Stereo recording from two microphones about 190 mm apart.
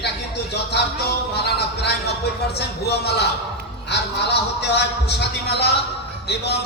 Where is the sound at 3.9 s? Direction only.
60° left (ahead or behind).